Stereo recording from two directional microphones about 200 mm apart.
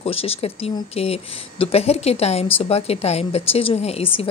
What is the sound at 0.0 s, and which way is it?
A woman's voice, 30° left (ahead or behind).